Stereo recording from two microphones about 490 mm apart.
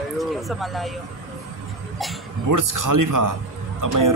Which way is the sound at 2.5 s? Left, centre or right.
Right.